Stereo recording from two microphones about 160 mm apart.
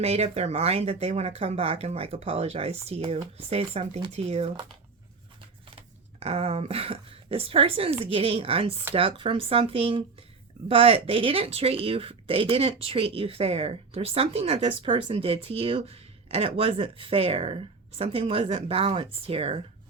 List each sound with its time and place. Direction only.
0.0 s speech: 40° right (ahead or behind)
5.7 s speech: 40° right (ahead or behind)